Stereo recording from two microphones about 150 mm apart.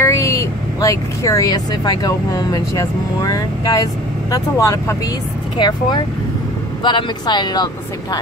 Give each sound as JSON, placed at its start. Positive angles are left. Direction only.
{"t": 0.0, "sound": "speech", "side_deg": 20}